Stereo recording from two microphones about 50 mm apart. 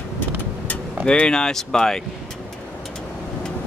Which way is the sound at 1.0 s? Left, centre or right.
Centre.